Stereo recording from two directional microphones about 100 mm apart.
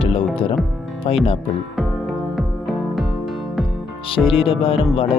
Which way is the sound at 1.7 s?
Centre (ahead or behind).